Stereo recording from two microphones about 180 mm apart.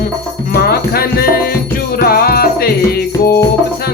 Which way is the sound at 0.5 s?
60° left (ahead or behind).